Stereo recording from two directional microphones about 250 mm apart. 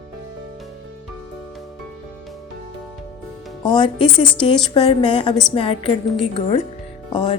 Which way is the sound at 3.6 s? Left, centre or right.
Centre.